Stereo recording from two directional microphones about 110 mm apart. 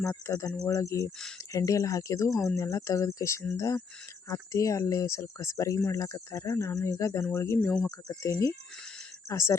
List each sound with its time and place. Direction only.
0.3 s speech: 30° left (ahead or behind)
7.9 s speech: 35° left (ahead or behind)